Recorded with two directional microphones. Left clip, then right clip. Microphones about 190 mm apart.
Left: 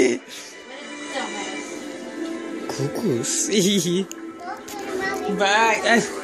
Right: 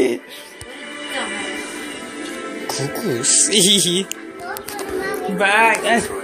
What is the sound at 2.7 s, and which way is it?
Speech, 45° left (ahead or behind).